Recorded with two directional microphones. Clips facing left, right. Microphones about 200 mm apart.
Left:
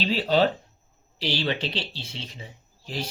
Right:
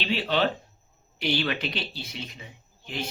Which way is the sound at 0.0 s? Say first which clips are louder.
Left 4 dB; 35° left (ahead or behind).